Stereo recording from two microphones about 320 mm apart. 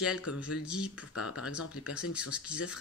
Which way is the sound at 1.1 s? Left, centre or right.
Left.